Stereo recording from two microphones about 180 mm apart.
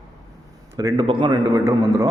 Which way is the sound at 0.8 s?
20° right (ahead or behind).